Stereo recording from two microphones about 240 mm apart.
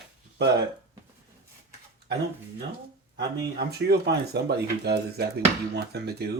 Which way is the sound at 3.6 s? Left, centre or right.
Right.